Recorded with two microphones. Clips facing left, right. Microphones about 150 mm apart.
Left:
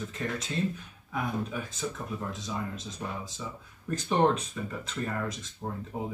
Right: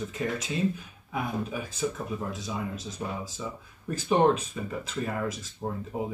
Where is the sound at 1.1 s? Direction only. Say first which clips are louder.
Right 1 dB; 5° right (ahead or behind).